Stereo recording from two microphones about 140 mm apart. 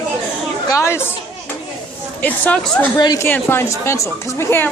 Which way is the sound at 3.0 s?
30° left (ahead or behind).